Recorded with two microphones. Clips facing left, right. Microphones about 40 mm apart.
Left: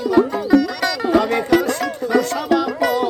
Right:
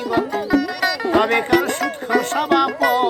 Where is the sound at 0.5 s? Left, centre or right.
Centre.